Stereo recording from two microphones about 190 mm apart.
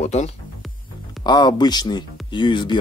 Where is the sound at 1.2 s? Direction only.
20° left (ahead or behind).